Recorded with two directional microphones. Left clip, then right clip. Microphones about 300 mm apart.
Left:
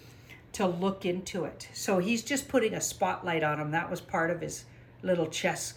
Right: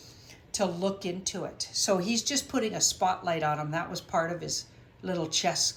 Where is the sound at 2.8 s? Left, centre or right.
Centre.